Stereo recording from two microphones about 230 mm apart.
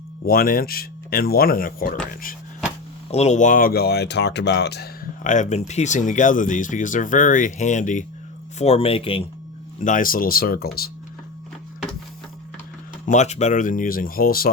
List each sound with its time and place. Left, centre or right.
0.3 s speech: left
3.1 s speech: left
9.8 s speech: left
13.1 s speech: left